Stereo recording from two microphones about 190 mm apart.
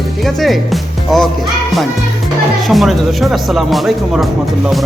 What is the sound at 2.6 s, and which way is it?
Speech, centre (ahead or behind).